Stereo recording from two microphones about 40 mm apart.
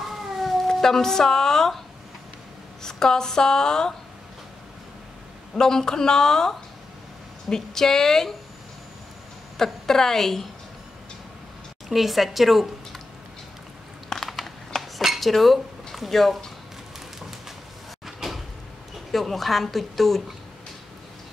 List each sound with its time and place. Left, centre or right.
0.0 s cat: centre
0.7 s speech: centre
2.8 s speech: centre
5.5 s speech: centre
9.6 s speech: centre
11.9 s a woman's voice: centre
14.0 s a sound: centre
15.1 s cutlery: centre
18.0 s cupboard open or close: centre
19.1 s a woman's voice: centre